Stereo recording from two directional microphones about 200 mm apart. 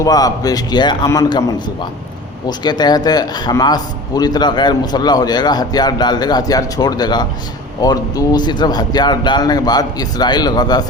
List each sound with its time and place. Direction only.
0.0 s a man's voice: 20° left (ahead or behind)